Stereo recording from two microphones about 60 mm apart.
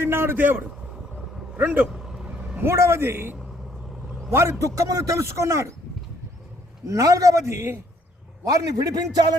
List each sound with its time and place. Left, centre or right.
0.0 s a man's voice: right
1.9 s vehicle: centre
2.2 s vehicle: centre
2.6 s a man's voice: right
6.8 s a man's voice: right
8.4 s a man's voice: right